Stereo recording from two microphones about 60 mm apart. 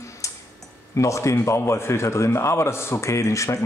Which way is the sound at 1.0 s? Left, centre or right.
Left.